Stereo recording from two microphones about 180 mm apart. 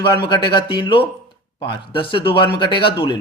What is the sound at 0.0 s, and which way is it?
Speech, 25° left (ahead or behind).